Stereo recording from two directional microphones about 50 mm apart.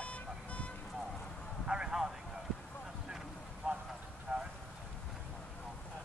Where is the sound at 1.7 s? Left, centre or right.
Centre.